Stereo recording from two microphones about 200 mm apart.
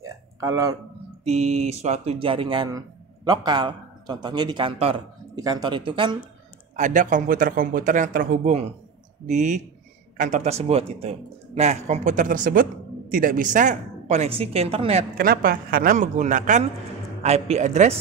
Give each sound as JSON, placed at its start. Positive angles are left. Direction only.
{"t": 0.0, "sound": "a sound", "side_deg": -15}
{"t": 1.2, "sound": "a man's voice", "side_deg": -35}
{"t": 6.8, "sound": "speech", "side_deg": -40}
{"t": 15.1, "sound": "a man's voice", "side_deg": -50}